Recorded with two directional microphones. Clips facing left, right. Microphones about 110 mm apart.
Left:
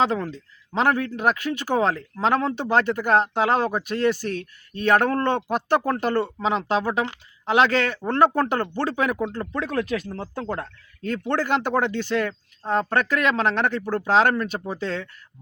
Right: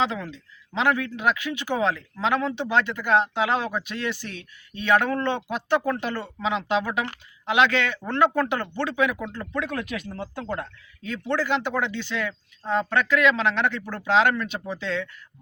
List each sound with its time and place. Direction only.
0.0 s speech: 40° left (ahead or behind)
11.0 s speech: 50° left (ahead or behind)